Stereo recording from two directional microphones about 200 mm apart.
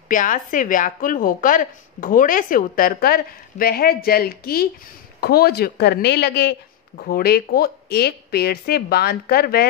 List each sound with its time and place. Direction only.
0.1 s a woman's voice: 40° left (ahead or behind)